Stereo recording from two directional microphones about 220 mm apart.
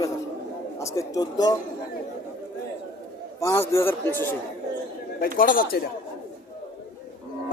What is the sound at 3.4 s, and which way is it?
Speech, 15° left (ahead or behind).